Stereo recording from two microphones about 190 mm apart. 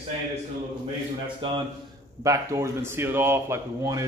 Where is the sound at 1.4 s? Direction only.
25° right (ahead or behind).